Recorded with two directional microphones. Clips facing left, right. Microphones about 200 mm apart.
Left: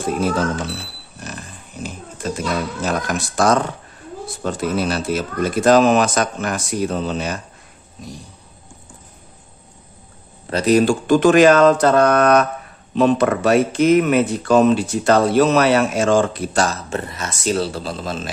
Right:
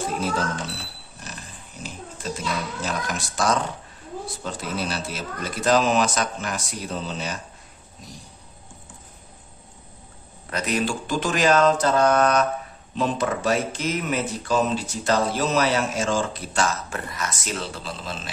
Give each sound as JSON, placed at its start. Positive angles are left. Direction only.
{"t": 1.2, "sound": "speech", "side_deg": 55}
{"t": 10.5, "sound": "speech", "side_deg": 35}
{"t": 16.9, "sound": "speech", "side_deg": 25}